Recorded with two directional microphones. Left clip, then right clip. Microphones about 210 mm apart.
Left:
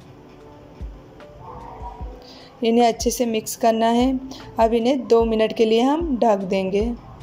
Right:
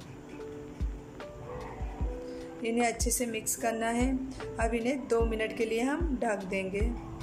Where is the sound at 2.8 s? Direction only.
25° left (ahead or behind).